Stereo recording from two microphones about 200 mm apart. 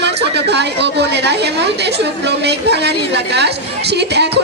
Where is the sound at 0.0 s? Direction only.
60° right (ahead or behind).